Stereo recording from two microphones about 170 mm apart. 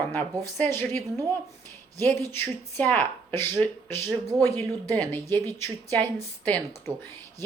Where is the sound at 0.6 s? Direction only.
15° left (ahead or behind).